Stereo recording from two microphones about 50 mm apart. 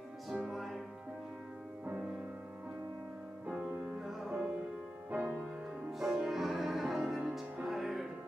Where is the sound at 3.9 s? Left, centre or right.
Centre.